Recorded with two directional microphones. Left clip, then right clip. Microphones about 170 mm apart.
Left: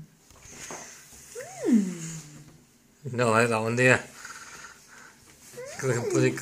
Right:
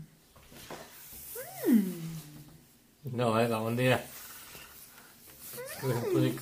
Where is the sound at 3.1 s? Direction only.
10° left (ahead or behind).